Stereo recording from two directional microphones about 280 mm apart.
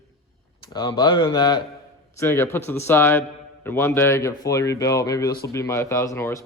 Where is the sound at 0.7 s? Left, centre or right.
Centre.